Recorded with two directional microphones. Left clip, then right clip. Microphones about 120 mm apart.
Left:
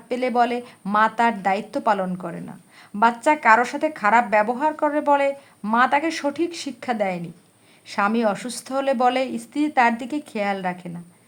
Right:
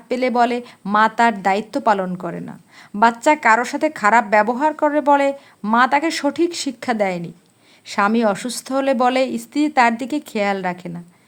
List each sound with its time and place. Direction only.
0.1 s a woman's voice: 30° right (ahead or behind)